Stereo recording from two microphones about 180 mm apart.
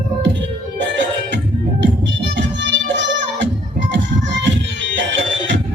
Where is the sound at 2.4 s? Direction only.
85° right.